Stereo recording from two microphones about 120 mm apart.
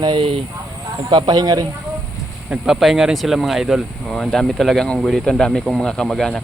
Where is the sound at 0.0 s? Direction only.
45° right (ahead or behind).